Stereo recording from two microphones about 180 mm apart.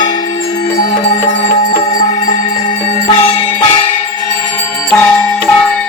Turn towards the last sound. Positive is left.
turn(degrees=5)  # may be behind; listen again after turning